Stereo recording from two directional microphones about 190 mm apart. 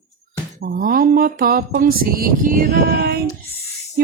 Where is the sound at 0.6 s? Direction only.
50° right (ahead or behind).